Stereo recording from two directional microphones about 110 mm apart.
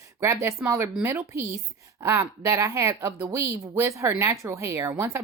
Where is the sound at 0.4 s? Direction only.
25° right (ahead or behind).